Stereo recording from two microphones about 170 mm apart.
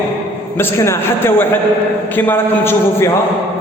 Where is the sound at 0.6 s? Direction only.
15° left (ahead or behind).